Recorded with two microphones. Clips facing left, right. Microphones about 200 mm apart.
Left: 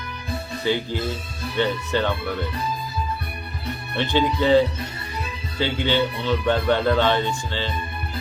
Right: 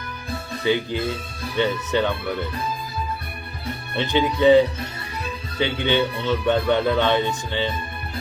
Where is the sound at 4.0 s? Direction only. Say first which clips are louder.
Right 1 dB; 20° right (ahead or behind).